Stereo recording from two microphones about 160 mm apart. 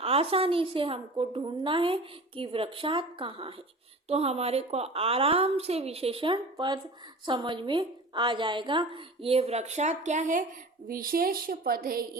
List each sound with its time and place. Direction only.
0.0 s a woman's voice: 40° right (ahead or behind)
10.8 s speech: 65° right (ahead or behind)